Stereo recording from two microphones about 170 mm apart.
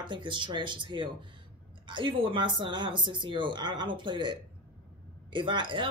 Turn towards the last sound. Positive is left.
turn(degrees=-30)  # may be behind; listen again after turning